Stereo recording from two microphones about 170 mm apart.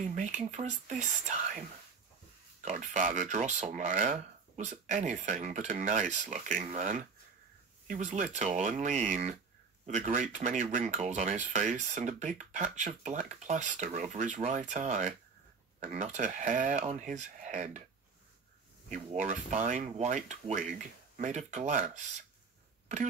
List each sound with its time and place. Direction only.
0.0 s speech: 45° right (ahead or behind)
19.1 s speech: 45° right (ahead or behind)